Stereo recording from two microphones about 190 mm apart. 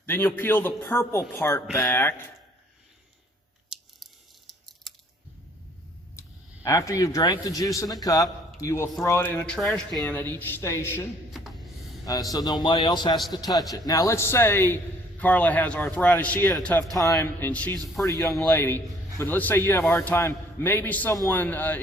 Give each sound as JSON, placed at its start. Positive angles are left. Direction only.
{"t": 0.0, "sound": "speech", "side_deg": 10}
{"t": 4.6, "sound": "chewing", "side_deg": 0}
{"t": 6.1, "sound": "a man's voice", "side_deg": 15}
{"t": 11.3, "sound": "a sound", "side_deg": 0}
{"t": 12.3, "sound": "speech", "side_deg": 20}